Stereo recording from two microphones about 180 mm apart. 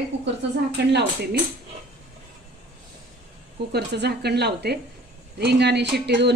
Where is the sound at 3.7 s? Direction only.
65° right (ahead or behind).